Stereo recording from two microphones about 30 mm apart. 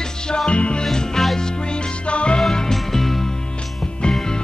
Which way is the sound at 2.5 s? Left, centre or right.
Centre.